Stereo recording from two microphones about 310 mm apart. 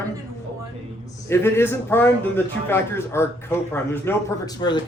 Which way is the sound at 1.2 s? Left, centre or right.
Centre.